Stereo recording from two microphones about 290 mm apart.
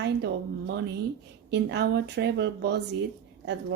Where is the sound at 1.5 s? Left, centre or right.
Right.